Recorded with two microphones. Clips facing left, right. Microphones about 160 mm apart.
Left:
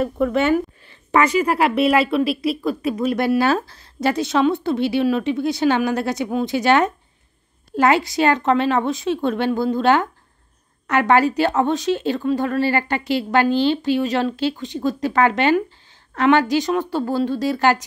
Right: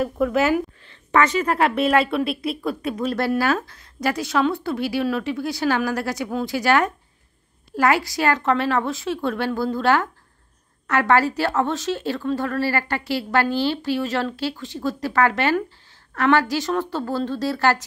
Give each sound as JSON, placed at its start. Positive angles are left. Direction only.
{"t": 0.0, "sound": "a woman's voice", "side_deg": 0}
{"t": 0.8, "sound": "a woman's voice", "side_deg": 10}
{"t": 3.2, "sound": "a woman's voice", "side_deg": 15}
{"t": 3.4, "sound": "a woman's voice", "side_deg": 30}